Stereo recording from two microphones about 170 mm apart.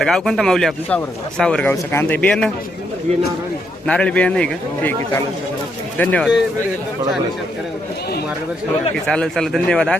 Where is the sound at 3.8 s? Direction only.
5° left (ahead or behind).